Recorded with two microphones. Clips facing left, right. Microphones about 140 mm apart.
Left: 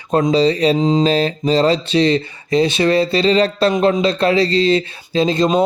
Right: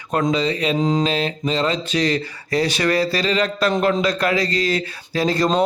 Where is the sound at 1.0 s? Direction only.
35° left (ahead or behind).